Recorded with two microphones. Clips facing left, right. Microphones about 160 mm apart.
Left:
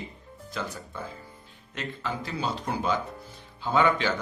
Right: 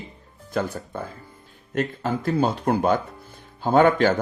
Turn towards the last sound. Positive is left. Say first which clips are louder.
# right 7 dB
turn(degrees=-50)  # may be behind; listen again after turning